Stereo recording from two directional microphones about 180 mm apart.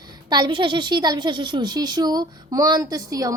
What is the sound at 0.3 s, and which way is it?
A woman's voice, 25° right (ahead or behind).